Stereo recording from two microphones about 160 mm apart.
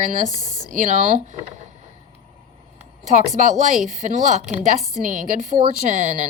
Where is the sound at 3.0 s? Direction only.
50° right (ahead or behind).